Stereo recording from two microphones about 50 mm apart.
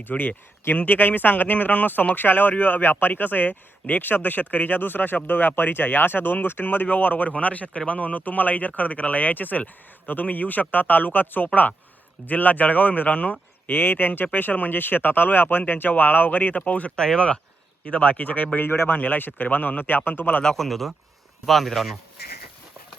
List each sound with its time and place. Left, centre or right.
0.1 s speech: left
16.9 s a man's voice: centre; by 18.4 s left
18.5 s speech: left
20.4 s speech: centre
20.7 s speech: centre